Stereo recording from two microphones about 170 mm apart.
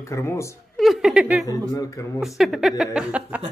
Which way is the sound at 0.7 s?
Centre (ahead or behind).